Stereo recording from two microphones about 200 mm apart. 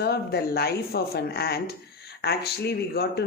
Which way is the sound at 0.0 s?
55° left (ahead or behind).